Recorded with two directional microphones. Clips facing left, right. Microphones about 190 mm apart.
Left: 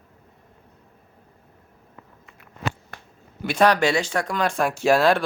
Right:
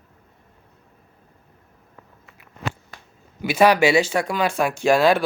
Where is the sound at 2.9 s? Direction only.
60° left (ahead or behind).